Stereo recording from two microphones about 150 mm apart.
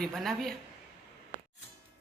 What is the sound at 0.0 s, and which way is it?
Speech, centre (ahead or behind).